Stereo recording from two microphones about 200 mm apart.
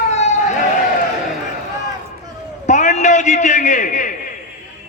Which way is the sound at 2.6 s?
35° left (ahead or behind).